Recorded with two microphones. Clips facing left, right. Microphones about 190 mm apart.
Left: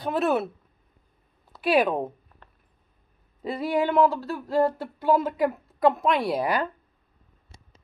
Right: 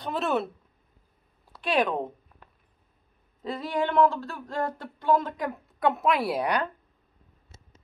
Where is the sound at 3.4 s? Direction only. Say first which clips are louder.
Left 4 dB; 10° left (ahead or behind).